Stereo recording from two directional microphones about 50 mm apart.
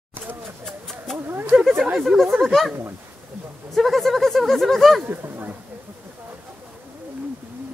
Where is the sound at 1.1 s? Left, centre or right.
Right.